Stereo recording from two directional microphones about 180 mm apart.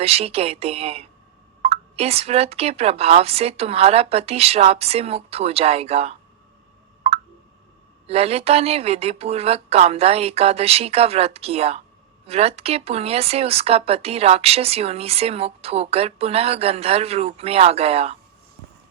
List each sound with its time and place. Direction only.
0.0 s speech: 35° right (ahead or behind)
7.1 s plop: 35° right (ahead or behind)
8.0 s speech: 35° right (ahead or behind)